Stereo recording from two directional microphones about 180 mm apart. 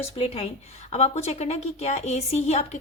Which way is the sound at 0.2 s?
35° left (ahead or behind).